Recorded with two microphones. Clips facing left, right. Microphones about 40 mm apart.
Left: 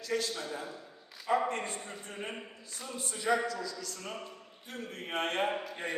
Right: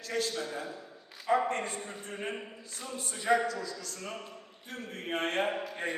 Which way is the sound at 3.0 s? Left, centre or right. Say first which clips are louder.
Right 2 dB; right.